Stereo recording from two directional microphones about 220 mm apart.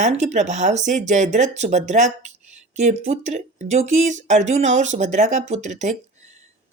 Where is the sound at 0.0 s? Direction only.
30° right (ahead or behind).